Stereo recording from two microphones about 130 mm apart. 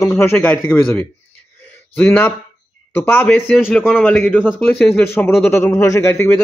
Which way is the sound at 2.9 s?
15° left (ahead or behind).